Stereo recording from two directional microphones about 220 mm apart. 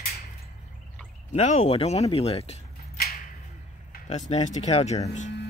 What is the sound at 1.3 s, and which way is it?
Speech, 30° left (ahead or behind).